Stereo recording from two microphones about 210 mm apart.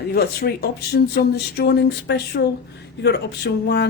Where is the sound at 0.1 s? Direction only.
50° left (ahead or behind).